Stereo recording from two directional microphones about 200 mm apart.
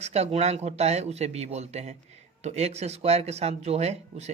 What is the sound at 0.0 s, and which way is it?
Speech, 30° right (ahead or behind).